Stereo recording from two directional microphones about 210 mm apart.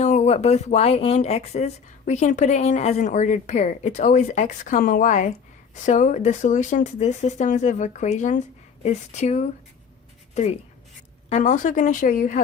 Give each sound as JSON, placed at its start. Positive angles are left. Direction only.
{"t": 0.0, "sound": "speech", "side_deg": 35}